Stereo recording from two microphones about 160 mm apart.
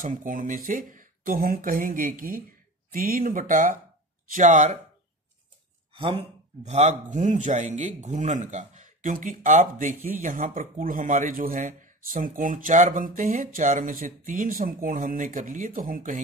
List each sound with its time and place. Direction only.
0.0 s speech: 55° right (ahead or behind)
5.9 s speech: 35° right (ahead or behind); by 16.2 s 60° right (ahead or behind)